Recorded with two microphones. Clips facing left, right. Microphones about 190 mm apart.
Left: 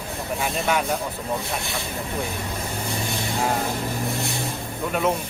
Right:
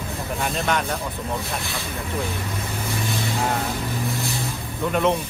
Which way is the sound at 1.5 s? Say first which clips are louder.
Left 1 dB; 15° left (ahead or behind).